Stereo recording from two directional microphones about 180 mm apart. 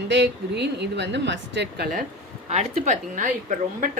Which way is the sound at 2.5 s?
40° right (ahead or behind).